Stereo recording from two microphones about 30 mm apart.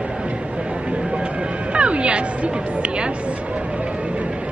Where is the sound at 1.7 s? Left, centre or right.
Right.